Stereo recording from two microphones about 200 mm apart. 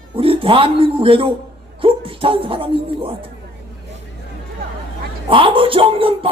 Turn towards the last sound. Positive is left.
turn(degrees=-25)  # may be behind; listen again after turning